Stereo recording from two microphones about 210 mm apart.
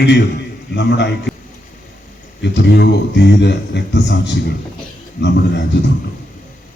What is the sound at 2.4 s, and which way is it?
A man's voice, 55° left (ahead or behind).